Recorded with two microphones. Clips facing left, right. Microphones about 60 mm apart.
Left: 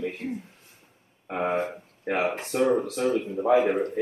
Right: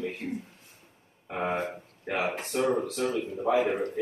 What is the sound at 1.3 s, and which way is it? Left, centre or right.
Speech, left.